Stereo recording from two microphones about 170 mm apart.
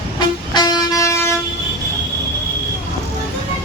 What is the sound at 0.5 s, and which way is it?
Vehicle, 20° left (ahead or behind).